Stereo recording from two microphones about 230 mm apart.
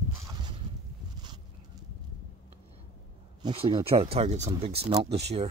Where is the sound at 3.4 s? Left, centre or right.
Right.